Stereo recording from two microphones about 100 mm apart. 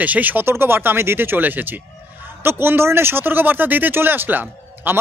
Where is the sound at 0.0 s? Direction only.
15° right (ahead or behind).